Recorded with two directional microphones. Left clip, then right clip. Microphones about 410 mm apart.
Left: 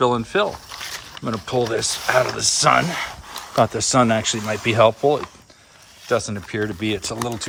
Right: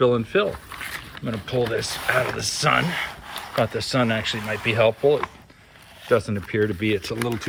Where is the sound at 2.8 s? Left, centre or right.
Centre.